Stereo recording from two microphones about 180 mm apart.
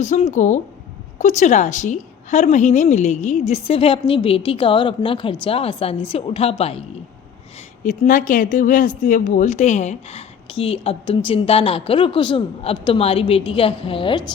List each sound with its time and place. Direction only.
0.0 s speech: 40° left (ahead or behind)
7.9 s speech: 45° left (ahead or behind); by 14.3 s 30° left (ahead or behind)